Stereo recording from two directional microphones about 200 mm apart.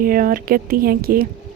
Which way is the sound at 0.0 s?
45° right (ahead or behind).